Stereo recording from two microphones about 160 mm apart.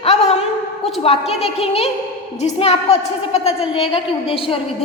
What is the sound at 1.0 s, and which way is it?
A woman's voice, 40° left (ahead or behind).